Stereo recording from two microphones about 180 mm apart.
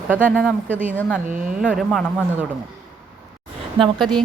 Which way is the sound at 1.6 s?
Centre (ahead or behind).